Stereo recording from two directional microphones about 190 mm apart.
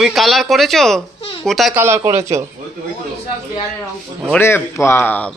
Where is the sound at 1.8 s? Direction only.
15° right (ahead or behind).